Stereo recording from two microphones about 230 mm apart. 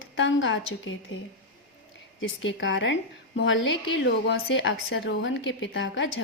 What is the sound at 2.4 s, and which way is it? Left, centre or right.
A woman's voice, left.